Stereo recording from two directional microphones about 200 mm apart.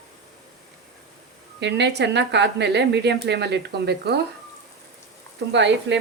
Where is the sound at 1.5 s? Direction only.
60° right (ahead or behind).